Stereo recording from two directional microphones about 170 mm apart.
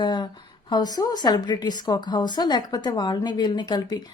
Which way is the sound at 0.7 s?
25° left (ahead or behind).